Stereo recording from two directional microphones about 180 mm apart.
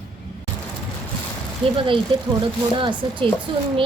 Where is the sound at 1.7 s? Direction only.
30° right (ahead or behind).